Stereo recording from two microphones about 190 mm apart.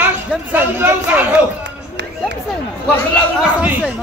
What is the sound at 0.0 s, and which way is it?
Speech, 10° right (ahead or behind).